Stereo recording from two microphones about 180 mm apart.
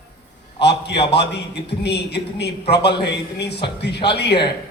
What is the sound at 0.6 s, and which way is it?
A man's voice, 70° left (ahead or behind).